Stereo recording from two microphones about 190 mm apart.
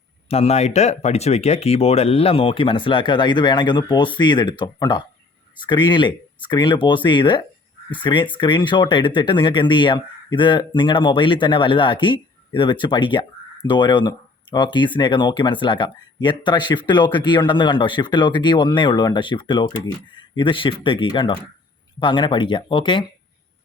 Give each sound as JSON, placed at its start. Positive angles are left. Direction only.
{"t": 0.3, "sound": "speech", "side_deg": 35}